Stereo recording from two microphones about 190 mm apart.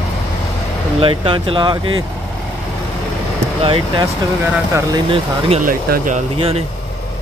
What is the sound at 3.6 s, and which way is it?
Speech, 30° right (ahead or behind).